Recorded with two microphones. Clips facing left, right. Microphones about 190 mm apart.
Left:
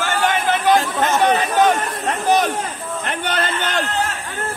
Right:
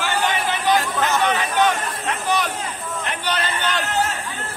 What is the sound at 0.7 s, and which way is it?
Chatter, 25° left (ahead or behind).